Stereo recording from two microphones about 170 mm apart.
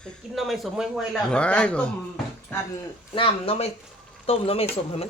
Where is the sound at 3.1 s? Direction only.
35° left (ahead or behind).